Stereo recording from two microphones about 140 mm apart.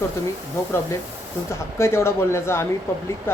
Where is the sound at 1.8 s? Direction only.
20° left (ahead or behind).